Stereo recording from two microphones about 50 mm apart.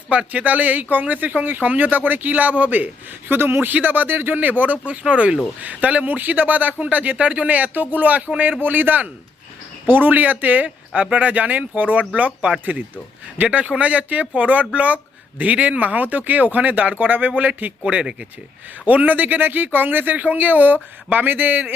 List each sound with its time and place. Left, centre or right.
0.1 s speech: right
3.3 s a man's voice: right
3.7 s speech: right
17.8 s speech: centre
18.9 s speech: right